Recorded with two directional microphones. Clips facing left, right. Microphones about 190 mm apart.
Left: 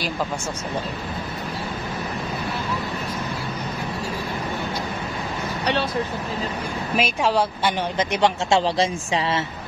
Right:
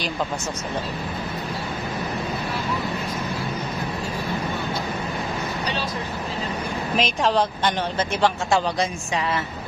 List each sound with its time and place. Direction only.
7.0 s a woman's voice: 10° left (ahead or behind)